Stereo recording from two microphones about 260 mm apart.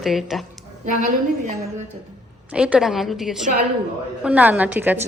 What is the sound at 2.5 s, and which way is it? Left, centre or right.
Speech, centre.